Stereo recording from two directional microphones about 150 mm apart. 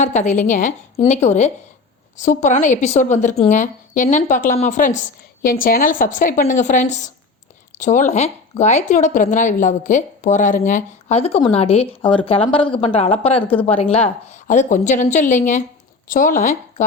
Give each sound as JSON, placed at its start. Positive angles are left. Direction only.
{"t": 0.0, "sound": "a woman's voice", "side_deg": 50}